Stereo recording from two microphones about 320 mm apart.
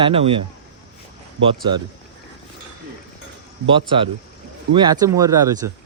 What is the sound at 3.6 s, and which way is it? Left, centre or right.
Speech, centre.